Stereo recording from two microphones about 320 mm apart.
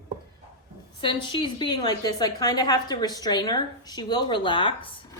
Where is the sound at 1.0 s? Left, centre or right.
Centre.